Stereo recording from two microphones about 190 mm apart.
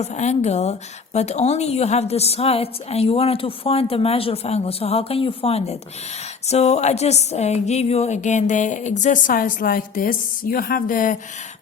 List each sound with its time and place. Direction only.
0.0 s a woman's voice: 35° left (ahead or behind)